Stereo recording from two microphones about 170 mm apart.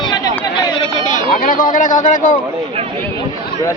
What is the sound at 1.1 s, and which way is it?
Speech, 55° left (ahead or behind).